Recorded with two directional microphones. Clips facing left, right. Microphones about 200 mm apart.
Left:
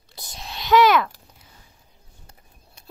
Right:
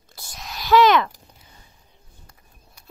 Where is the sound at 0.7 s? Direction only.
10° left (ahead or behind).